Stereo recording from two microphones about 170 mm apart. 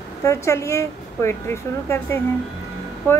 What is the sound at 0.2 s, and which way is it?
Speech, 15° left (ahead or behind).